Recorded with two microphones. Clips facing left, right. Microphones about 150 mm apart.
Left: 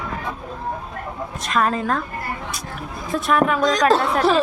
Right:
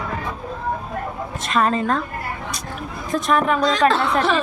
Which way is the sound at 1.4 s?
Centre (ahead or behind).